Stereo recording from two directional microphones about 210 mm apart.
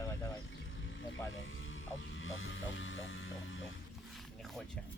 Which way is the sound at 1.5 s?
65° left (ahead or behind).